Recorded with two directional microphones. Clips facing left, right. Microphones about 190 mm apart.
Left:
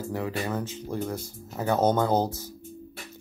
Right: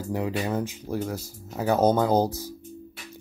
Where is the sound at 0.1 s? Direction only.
15° right (ahead or behind).